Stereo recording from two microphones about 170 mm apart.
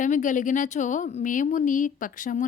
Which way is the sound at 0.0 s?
50° left (ahead or behind).